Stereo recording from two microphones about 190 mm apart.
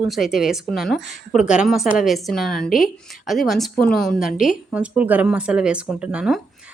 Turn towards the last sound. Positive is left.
turn(degrees=-5)  # may be behind; listen again after turning